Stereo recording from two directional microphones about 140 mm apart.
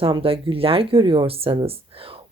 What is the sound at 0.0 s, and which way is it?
Speech, 40° right (ahead or behind).